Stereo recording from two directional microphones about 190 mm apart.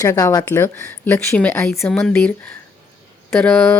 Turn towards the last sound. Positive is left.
turn(degrees=5)  # may be behind; listen again after turning